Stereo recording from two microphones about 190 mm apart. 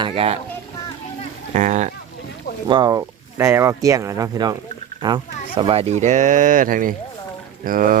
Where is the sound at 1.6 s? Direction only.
40° right (ahead or behind).